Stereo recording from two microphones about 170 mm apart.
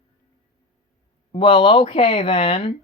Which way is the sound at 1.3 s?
30° left (ahead or behind).